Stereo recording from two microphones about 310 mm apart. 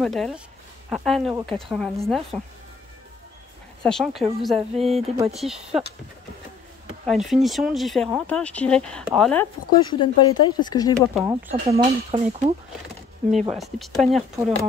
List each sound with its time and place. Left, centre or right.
0.0 s speech: centre
3.8 s speech: centre
5.0 s speech: centre
5.3 s speech: centre
7.1 s speech: centre
11.0 s speech: centre
11.8 s speech: right
13.5 s speech: centre